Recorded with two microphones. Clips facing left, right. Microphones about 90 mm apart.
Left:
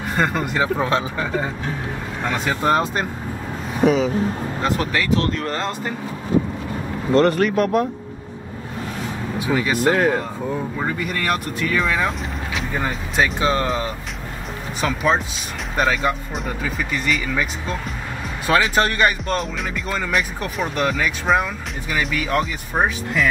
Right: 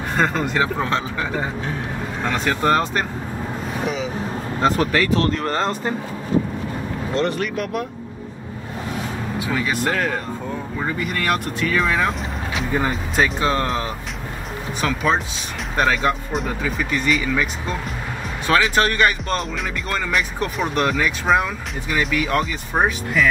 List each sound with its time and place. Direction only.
0.1 s speech: 5° left (ahead or behind)
2.2 s speech: 10° left (ahead or behind)
3.8 s speech: 45° left (ahead or behind)
4.6 s speech: 40° right (ahead or behind)
7.2 s speech: 45° left (ahead or behind)
9.5 s speech: 10° left (ahead or behind)
10.8 s speech: centre (ahead or behind)